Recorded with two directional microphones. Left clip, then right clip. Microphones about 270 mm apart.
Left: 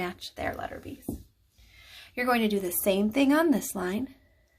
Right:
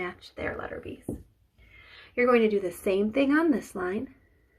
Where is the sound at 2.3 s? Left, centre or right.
Left.